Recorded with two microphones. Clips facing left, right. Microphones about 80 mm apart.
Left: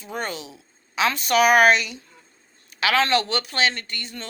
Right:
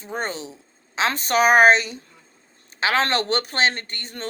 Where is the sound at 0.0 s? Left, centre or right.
Right.